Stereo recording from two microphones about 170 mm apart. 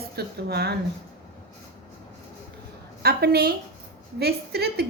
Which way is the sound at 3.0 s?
70° right (ahead or behind).